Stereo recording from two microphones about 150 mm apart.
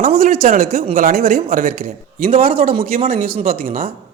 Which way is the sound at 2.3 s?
40° right (ahead or behind).